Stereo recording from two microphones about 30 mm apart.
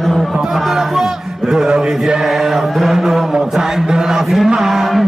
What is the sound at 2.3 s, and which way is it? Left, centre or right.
Speech, centre.